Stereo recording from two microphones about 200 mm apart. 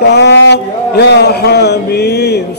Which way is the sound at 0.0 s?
60° left (ahead or behind).